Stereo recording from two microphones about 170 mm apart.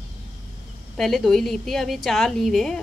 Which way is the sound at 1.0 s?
Centre (ahead or behind).